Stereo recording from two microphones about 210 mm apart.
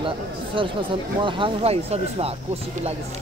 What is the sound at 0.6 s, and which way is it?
Speech, 25° right (ahead or behind).